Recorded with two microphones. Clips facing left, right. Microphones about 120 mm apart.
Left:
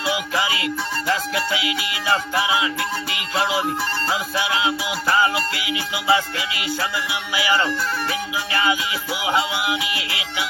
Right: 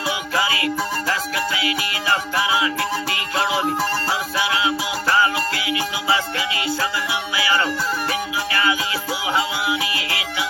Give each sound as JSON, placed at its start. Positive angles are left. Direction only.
{"t": 0.4, "sound": "music", "side_deg": 20}
{"t": 4.4, "sound": "music", "side_deg": 25}
{"t": 7.3, "sound": "music", "side_deg": 20}
{"t": 9.2, "sound": "music", "side_deg": 20}